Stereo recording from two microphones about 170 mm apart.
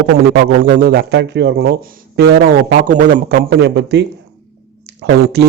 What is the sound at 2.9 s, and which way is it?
A man's voice, 55° right (ahead or behind).